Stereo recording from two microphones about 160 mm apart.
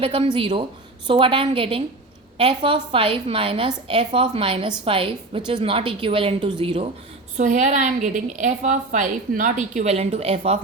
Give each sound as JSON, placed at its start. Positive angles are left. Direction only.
{"t": 0.0, "sound": "a woman's voice", "side_deg": -35}
{"t": 7.3, "sound": "a woman's voice", "side_deg": -50}